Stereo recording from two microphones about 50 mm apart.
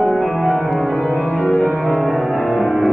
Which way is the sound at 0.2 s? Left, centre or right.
Centre.